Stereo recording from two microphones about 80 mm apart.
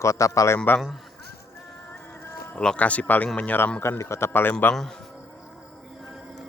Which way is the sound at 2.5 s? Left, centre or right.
Centre.